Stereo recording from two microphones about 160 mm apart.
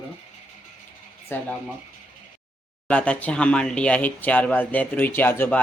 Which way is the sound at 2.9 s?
5° left (ahead or behind).